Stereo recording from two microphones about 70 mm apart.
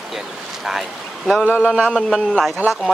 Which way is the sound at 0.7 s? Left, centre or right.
Centre.